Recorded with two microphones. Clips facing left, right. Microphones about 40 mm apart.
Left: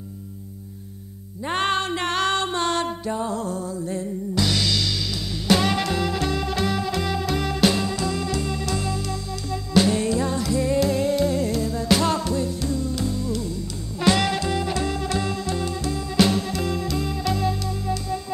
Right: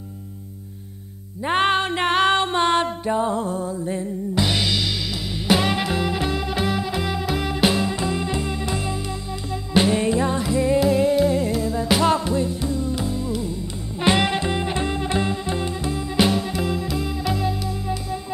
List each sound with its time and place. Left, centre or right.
1.4 s music: centre